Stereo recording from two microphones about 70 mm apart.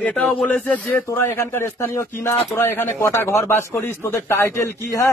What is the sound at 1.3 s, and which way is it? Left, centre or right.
Speech, left.